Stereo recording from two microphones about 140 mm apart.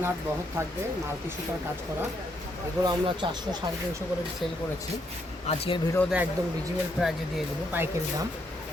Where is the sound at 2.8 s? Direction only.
30° right (ahead or behind).